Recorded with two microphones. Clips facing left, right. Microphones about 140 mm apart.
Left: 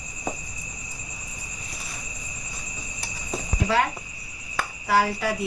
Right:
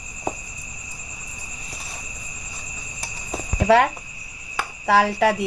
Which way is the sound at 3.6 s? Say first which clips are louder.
Right 7 dB; 70° right (ahead or behind).